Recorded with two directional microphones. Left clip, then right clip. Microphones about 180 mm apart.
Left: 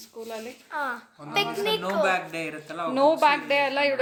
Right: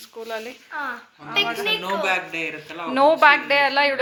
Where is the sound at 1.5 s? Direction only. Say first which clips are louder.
Right 3 dB; 90° left.